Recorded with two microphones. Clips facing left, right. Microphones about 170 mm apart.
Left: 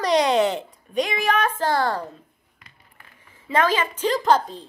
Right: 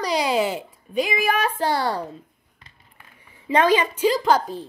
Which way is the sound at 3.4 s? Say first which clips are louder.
Right 3 dB; 15° right (ahead or behind).